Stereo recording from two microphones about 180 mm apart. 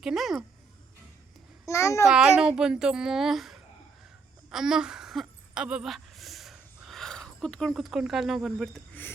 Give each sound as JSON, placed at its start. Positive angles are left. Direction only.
{"t": 0.0, "sound": "a child's voice", "side_deg": 0}
{"t": 1.6, "sound": "a child's voice", "side_deg": 15}
{"t": 2.0, "sound": "a child's voice", "side_deg": -5}
{"t": 4.5, "sound": "a sound", "side_deg": -5}